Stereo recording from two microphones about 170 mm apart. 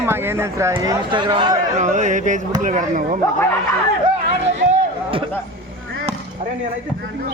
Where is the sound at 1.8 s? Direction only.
45° right (ahead or behind).